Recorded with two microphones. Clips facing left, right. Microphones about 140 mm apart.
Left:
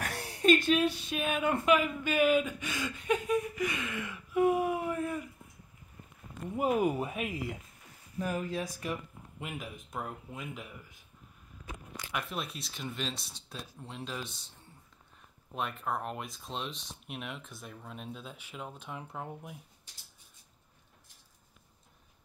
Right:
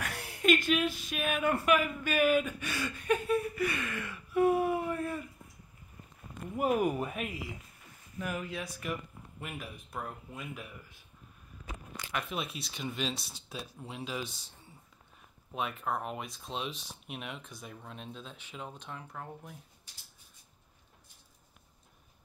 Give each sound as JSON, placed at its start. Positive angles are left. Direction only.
{"t": 0.0, "sound": "a sound", "side_deg": 35}
{"t": 0.7, "sound": "speech", "side_deg": 30}
{"t": 6.5, "sound": "speech", "side_deg": 25}
{"t": 8.2, "sound": "speech", "side_deg": 40}
{"t": 9.4, "sound": "speech", "side_deg": 20}
{"t": 12.1, "sound": "speech", "side_deg": 0}
{"t": 15.5, "sound": "speech", "side_deg": 0}
{"t": 18.9, "sound": "speech", "side_deg": 15}